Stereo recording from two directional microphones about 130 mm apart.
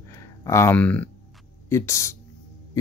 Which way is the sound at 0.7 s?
10° left (ahead or behind).